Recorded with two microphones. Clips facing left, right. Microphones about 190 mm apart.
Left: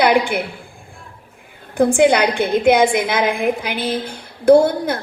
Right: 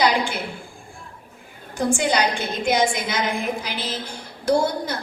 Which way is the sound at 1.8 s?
55° left (ahead or behind).